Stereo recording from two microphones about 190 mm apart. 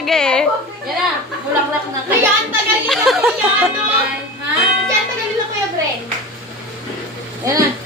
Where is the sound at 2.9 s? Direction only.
Centre (ahead or behind).